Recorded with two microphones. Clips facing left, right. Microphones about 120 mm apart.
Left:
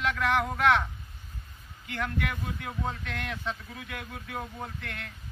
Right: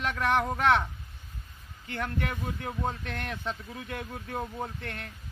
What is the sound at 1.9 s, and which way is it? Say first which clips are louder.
Speech: even; 35° right (ahead or behind).